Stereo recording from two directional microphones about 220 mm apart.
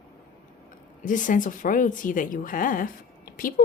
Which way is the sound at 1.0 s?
35° left (ahead or behind).